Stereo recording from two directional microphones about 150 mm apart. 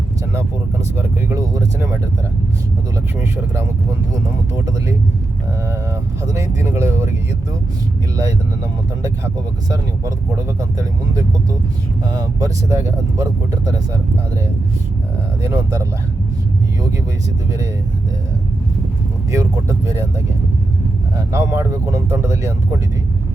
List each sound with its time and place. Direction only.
0.3 s speech: 20° right (ahead or behind)
3.2 s speech: 20° right (ahead or behind)
6.2 s speech: 20° right (ahead or behind)
10.6 s speech: 20° right (ahead or behind)
15.4 s speech: 20° right (ahead or behind)
19.3 s speech: 20° right (ahead or behind)
21.2 s speech: 20° right (ahead or behind)